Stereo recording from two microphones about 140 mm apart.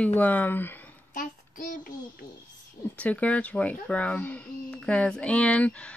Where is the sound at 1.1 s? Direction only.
75° left (ahead or behind).